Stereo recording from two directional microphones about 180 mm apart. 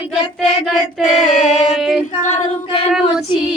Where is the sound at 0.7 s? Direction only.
Centre (ahead or behind).